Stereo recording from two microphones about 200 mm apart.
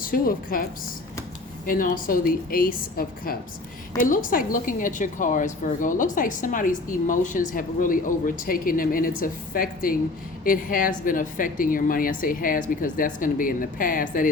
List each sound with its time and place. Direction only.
0.0 s a woman's voice: 45° left (ahead or behind)